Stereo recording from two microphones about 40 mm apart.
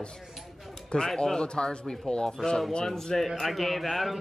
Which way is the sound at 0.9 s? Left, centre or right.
Centre.